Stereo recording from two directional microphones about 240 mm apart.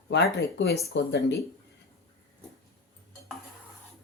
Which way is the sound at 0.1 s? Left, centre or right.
Left.